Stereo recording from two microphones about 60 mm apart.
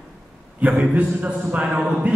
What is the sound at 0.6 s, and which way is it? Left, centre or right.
A man's voice, centre.